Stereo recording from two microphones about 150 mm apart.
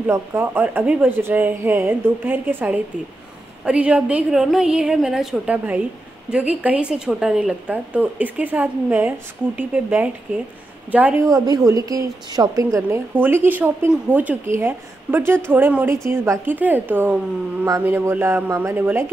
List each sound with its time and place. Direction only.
0.0 s a woman's voice: 15° right (ahead or behind)
11.2 s a woman's voice: 25° right (ahead or behind)